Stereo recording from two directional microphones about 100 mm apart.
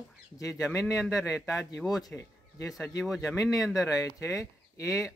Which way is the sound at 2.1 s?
35° left (ahead or behind).